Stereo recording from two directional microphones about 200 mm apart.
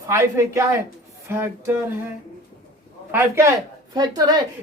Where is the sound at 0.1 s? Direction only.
15° right (ahead or behind).